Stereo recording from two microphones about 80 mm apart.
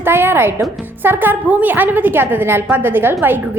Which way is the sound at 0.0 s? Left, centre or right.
Right.